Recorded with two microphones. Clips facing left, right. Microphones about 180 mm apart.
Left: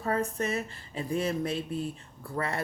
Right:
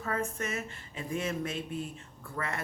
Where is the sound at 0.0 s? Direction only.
35° left (ahead or behind).